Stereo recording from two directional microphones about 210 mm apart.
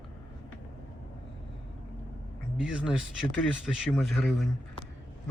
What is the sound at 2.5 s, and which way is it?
Speech, 5° right (ahead or behind).